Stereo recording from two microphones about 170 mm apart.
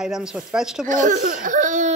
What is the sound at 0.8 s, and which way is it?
Speech, 50° right (ahead or behind).